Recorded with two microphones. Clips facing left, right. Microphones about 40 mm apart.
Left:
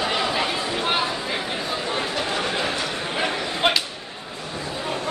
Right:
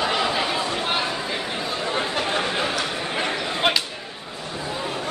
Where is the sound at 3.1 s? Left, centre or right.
Centre.